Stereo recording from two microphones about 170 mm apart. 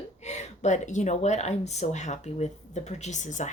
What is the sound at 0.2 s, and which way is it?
Speech, 40° left (ahead or behind).